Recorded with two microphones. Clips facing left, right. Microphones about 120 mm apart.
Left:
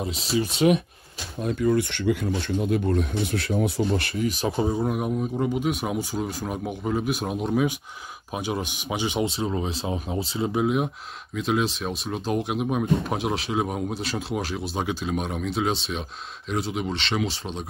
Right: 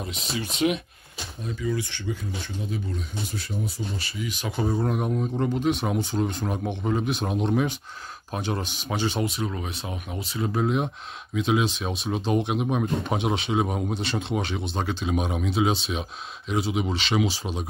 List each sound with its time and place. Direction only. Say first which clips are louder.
0.0 s speech: left 6 dB; 35° left (ahead or behind)
1.4 s speech: left 7 dB; 55° left (ahead or behind)
4.3 s speech: left 6 dB; 35° left (ahead or behind)
4.7 s speech: even; 5° left (ahead or behind)
9.2 s speech: left 3 dB; 25° left (ahead or behind)
10.5 s speech: left 1 dB; 10° left (ahead or behind)
15.0 s speech: right 1 dB; centre (ahead or behind)